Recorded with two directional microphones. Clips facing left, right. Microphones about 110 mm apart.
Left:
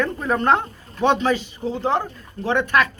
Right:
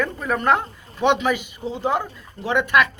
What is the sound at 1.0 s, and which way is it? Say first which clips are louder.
Speech: left 1 dB; 15° right (ahead or behind).